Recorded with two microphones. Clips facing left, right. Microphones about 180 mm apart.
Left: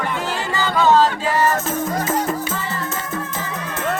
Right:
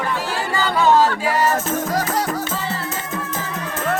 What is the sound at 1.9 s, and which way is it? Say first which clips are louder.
Music: left 1 dB; 90° right.